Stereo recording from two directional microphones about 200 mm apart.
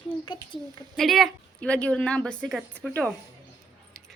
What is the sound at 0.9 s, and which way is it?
A woman's voice, centre (ahead or behind).